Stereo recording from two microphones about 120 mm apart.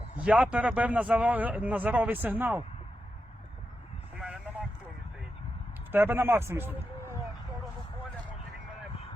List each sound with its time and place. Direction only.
0.2 s a man's voice: 10° right (ahead or behind)
4.1 s a sound: 10° right (ahead or behind)
5.9 s a man's voice: 20° right (ahead or behind)